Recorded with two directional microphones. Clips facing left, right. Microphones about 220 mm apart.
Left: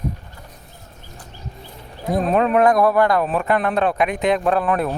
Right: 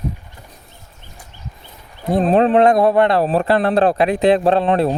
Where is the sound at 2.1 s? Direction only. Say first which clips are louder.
Right 4 dB; 30° right (ahead or behind).